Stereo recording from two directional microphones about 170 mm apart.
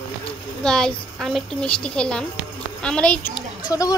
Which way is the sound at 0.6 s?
5° left (ahead or behind).